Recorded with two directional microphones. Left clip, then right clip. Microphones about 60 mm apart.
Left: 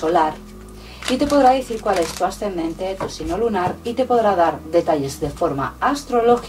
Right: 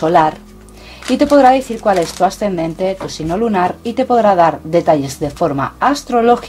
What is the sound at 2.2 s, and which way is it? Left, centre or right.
Speech, right.